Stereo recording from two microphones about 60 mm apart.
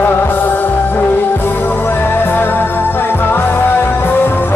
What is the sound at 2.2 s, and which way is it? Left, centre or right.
Music, left.